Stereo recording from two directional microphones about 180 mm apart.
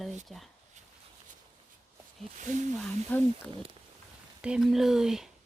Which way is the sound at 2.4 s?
45° right (ahead or behind).